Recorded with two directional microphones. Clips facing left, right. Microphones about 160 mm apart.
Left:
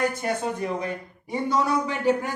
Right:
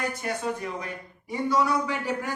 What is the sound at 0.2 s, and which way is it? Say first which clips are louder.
Speech: left 3 dB; 25° left (ahead or behind).